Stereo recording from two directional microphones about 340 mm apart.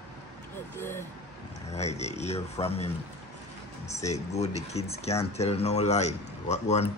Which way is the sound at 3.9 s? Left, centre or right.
Centre.